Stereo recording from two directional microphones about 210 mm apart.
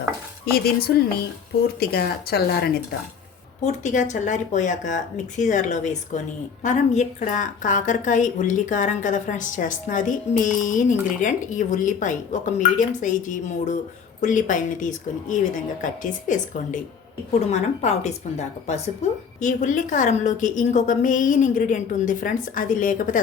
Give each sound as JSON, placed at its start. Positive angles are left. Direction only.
{"t": 0.5, "sound": "speech", "side_deg": 45}
{"t": 3.6, "sound": "a woman's voice", "side_deg": 35}
{"t": 17.5, "sound": "a woman's voice", "side_deg": 30}